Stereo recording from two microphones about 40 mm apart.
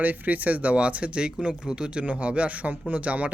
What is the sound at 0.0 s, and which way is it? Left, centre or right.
Speech, right.